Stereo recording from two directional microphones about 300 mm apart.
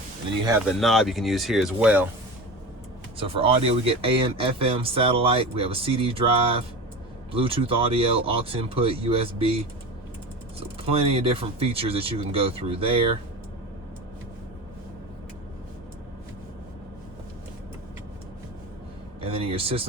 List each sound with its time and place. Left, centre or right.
0.8 s speech: centre
3.2 s speech: centre
10.8 s speech: centre
19.2 s speech: centre